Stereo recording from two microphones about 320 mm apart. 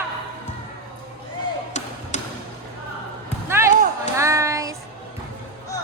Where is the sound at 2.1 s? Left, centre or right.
Left.